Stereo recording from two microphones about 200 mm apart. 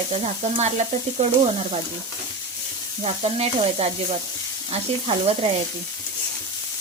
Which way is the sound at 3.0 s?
30° right (ahead or behind).